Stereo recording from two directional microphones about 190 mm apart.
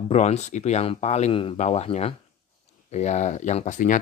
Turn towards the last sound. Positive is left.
turn(degrees=40)  # may be behind; listen again after turning